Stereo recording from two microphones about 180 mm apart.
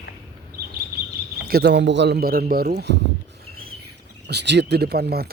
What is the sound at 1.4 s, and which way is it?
Speech, 60° right (ahead or behind).